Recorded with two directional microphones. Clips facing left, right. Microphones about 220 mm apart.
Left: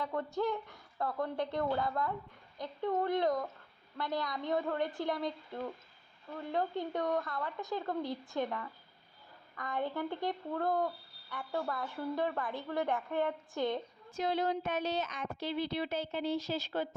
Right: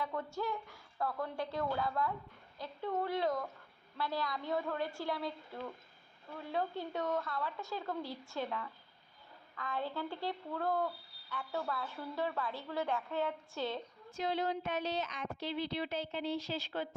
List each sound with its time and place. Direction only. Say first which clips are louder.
0.3 s a woman's voice: left 5 dB; 20° left (ahead or behind)
9.6 s speech: left 3 dB; 20° left (ahead or behind)
14.1 s speech: left 3 dB; 45° left (ahead or behind)